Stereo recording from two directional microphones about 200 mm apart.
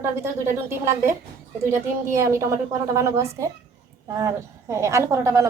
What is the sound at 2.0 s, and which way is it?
Speech, 15° right (ahead or behind).